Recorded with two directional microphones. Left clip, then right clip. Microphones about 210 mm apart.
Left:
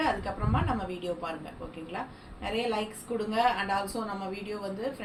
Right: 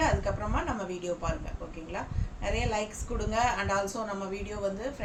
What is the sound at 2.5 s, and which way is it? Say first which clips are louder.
A woman's voice: left 1 dB; 15° right (ahead or behind).